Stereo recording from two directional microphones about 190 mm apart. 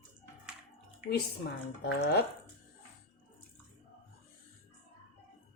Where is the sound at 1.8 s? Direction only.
55° left (ahead or behind).